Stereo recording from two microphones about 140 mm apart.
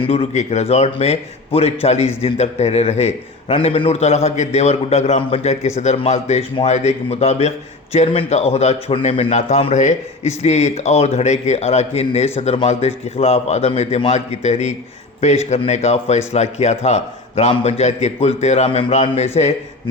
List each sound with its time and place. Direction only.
0.0 s a man's voice: 45° left (ahead or behind)